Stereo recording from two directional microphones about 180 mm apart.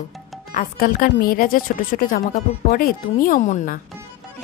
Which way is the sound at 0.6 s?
50° left (ahead or behind).